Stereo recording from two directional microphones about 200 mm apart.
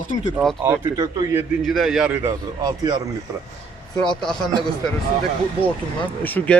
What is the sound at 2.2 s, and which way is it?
Speech, 20° right (ahead or behind).